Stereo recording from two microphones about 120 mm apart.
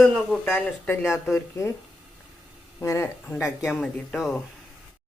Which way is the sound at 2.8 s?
20° left (ahead or behind).